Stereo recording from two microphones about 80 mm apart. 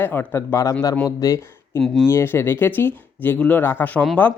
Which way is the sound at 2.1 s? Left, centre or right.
Left.